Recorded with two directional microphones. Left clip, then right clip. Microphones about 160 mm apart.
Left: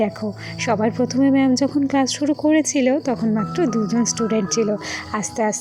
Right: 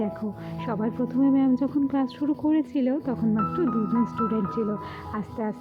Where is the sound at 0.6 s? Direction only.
25° left (ahead or behind).